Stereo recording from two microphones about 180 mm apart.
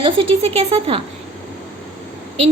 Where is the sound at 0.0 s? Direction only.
30° right (ahead or behind).